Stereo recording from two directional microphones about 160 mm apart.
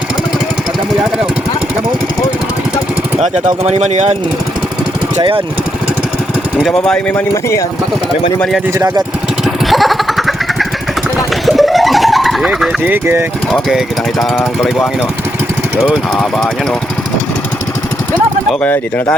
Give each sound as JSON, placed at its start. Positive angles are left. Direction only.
{"t": 3.2, "sound": "speech", "side_deg": -45}
{"t": 6.6, "sound": "speech", "side_deg": 5}
{"t": 9.6, "sound": "motorcycle", "side_deg": 0}
{"t": 11.4, "sound": "vehicle", "side_deg": 0}
{"t": 13.5, "sound": "speech", "side_deg": 0}
{"t": 15.9, "sound": "speech", "side_deg": 0}
{"t": 18.6, "sound": "speech", "side_deg": 10}